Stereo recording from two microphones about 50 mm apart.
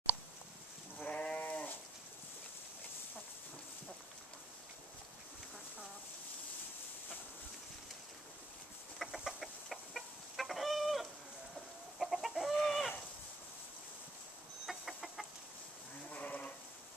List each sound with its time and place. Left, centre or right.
0.9 s sheep: centre
1.4 s goat: left
8.9 s chicken: centre
12.5 s chicken: centre
14.7 s chicken: centre
16.1 s sheep: left